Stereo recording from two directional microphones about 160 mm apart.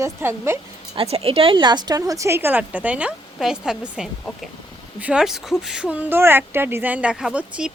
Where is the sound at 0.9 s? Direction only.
35° right (ahead or behind).